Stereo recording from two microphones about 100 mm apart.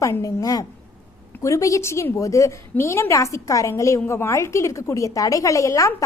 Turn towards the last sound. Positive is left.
turn(degrees=35)  # may be behind; listen again after turning